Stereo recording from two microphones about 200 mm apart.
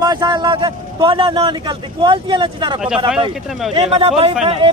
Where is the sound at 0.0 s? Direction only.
20° right (ahead or behind).